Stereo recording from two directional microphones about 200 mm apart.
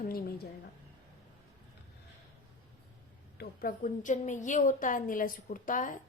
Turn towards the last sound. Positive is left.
turn(degrees=40)  # may be behind; listen again after turning